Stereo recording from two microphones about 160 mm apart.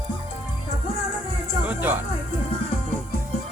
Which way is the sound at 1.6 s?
10° right (ahead or behind).